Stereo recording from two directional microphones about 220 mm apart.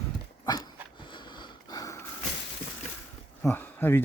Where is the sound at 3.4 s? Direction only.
10° left (ahead or behind).